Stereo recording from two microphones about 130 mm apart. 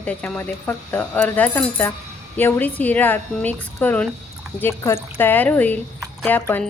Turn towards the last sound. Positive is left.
turn(degrees=10)  # may be behind; listen again after turning